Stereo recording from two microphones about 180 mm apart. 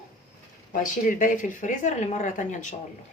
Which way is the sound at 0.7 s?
45° left (ahead or behind).